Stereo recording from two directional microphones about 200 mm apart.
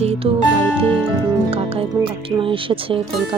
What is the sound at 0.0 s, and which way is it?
Music, 30° right (ahead or behind).